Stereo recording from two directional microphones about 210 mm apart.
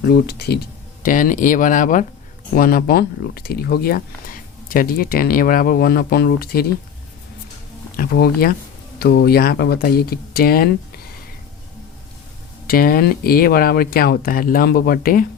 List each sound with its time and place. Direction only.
0.1 s speech: 50° left (ahead or behind)
1.0 s speech: 40° left (ahead or behind)
7.9 s speech: 45° left (ahead or behind)
12.6 s speech: 45° left (ahead or behind)